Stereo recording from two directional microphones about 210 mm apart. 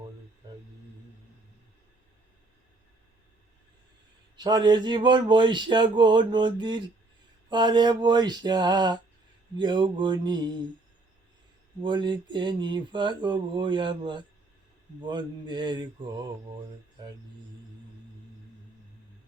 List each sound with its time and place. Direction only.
4.4 s speech: 20° right (ahead or behind)
11.8 s speech: 20° right (ahead or behind)